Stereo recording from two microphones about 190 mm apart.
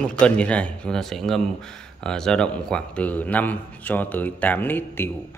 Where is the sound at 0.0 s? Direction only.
5° left (ahead or behind).